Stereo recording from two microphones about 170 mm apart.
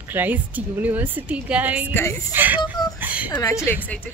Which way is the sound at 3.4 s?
15° left (ahead or behind).